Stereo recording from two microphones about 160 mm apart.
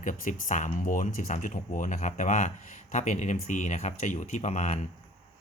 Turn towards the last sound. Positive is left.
turn(degrees=45)  # may be behind; listen again after turning